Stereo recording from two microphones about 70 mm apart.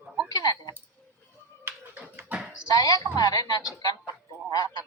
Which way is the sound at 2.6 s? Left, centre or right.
Left.